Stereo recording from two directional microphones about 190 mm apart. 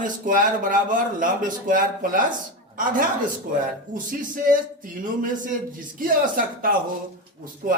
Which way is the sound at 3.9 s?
45° right (ahead or behind).